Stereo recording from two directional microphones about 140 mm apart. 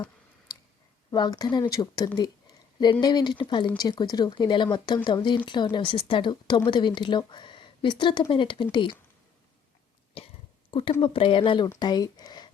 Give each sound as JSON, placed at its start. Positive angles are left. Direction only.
{"t": 1.1, "sound": "speech", "side_deg": 30}
{"t": 2.1, "sound": "a sound", "side_deg": 30}
{"t": 2.9, "sound": "speech", "side_deg": 30}
{"t": 10.2, "sound": "cough", "side_deg": 45}
{"t": 10.7, "sound": "speech", "side_deg": 40}